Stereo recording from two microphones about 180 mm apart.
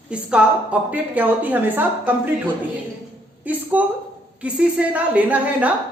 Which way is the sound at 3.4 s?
10° right (ahead or behind).